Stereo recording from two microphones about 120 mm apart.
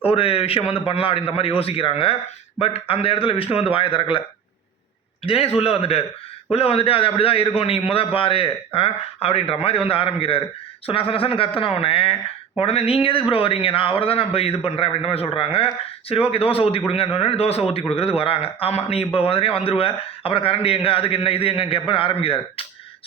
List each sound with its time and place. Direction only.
0.0 s a man's voice: 50° left (ahead or behind)
5.2 s a man's voice: 55° left (ahead or behind)